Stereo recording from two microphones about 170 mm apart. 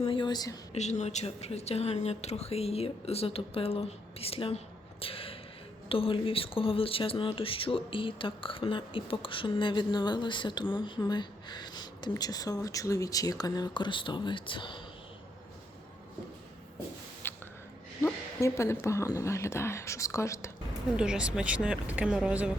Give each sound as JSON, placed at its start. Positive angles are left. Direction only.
{"t": 0.0, "sound": "speech", "side_deg": 30}
{"t": 0.7, "sound": "speech", "side_deg": 40}
{"t": 17.2, "sound": "a sound", "side_deg": 10}
{"t": 18.0, "sound": "speech", "side_deg": 15}
{"t": 20.9, "sound": "speech", "side_deg": -5}